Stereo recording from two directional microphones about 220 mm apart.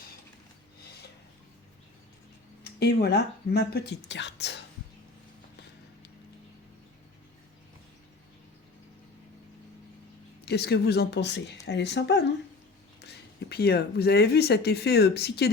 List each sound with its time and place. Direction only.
2.6 s speech: 45° left (ahead or behind)
10.4 s speech: 50° left (ahead or behind)